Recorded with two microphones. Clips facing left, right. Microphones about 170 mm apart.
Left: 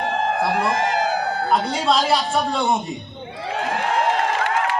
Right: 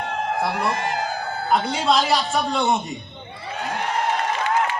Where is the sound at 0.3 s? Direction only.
90° left.